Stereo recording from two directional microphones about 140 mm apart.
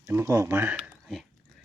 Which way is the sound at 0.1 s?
20° right (ahead or behind).